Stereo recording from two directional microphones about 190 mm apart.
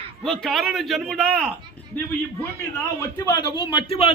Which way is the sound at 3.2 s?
20° left (ahead or behind).